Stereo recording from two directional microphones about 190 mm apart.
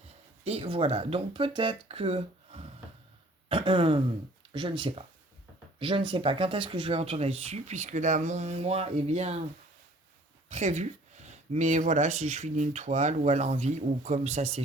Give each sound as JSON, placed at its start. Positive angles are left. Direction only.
{"t": 0.4, "sound": "a man's voice", "side_deg": -30}
{"t": 10.5, "sound": "speech", "side_deg": -35}